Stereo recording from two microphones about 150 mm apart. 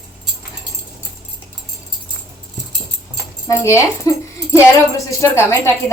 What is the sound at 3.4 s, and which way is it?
A woman's voice, 20° left (ahead or behind).